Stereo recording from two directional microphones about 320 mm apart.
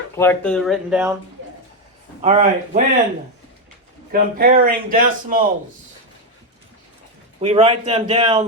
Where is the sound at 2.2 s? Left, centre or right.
Right.